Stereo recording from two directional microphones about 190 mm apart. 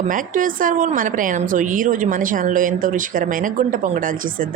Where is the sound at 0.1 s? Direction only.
45° right (ahead or behind).